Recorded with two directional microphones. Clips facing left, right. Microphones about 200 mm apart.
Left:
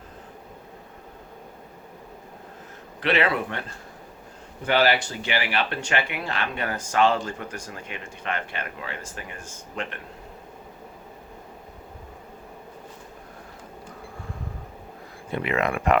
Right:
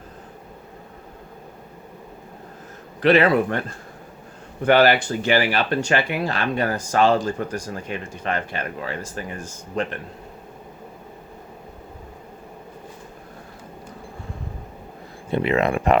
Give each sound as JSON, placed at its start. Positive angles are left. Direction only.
{"t": 3.0, "sound": "speech", "side_deg": -40}
{"t": 4.6, "sound": "speech", "side_deg": -55}
{"t": 15.3, "sound": "speech", "side_deg": -30}